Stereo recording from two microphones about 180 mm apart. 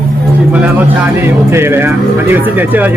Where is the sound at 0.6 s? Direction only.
10° right (ahead or behind).